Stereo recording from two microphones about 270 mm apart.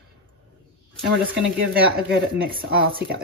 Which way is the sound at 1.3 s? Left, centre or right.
Right.